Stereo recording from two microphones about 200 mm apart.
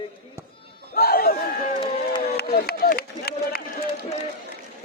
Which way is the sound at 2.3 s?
50° left (ahead or behind).